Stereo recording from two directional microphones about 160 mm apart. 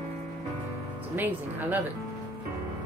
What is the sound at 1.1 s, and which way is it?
Speech, 10° right (ahead or behind).